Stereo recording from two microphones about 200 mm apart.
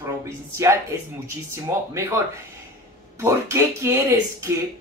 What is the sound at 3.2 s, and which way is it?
Speech, 15° right (ahead or behind).